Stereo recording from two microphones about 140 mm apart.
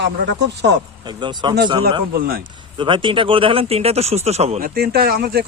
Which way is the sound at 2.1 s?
90° right.